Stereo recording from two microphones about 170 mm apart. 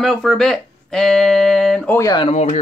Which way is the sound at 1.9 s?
20° left (ahead or behind).